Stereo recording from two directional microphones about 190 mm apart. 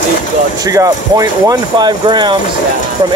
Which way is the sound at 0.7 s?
20° right (ahead or behind).